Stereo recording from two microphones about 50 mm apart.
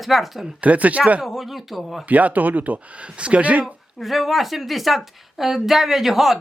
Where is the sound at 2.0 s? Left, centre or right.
Right.